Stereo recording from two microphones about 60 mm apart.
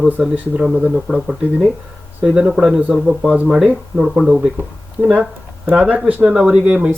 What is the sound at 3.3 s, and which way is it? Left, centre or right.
Speech, right.